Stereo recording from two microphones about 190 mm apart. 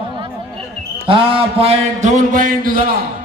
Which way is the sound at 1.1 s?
30° right (ahead or behind).